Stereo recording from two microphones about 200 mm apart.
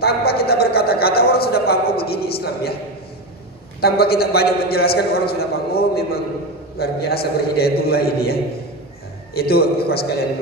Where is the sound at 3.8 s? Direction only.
50° left (ahead or behind).